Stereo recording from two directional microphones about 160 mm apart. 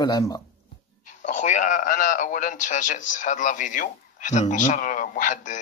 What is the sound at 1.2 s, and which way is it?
A man's voice, 50° left (ahead or behind).